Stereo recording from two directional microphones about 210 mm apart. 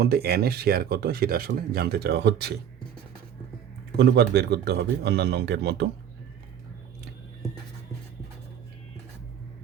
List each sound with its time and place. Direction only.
0.0 s speech: 45° right (ahead or behind)
3.9 s speech: 50° right (ahead or behind)